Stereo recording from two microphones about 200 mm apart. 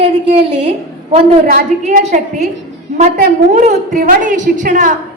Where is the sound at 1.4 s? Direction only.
40° right (ahead or behind).